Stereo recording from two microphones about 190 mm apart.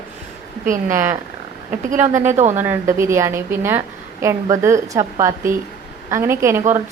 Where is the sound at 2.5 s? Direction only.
10° right (ahead or behind).